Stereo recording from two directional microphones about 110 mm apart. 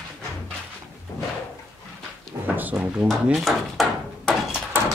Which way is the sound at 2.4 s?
15° right (ahead or behind).